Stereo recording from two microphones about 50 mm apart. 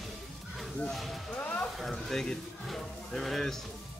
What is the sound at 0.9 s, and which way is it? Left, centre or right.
Music, centre.